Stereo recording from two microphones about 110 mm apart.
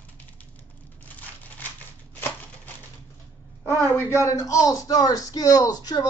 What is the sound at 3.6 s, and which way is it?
Speech, 25° left (ahead or behind).